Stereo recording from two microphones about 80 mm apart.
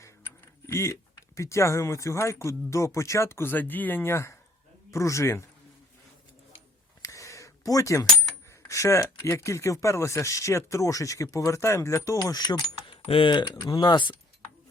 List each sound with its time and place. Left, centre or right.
0.7 s speech: left
7.0 s a sound: left
8.4 s speech: left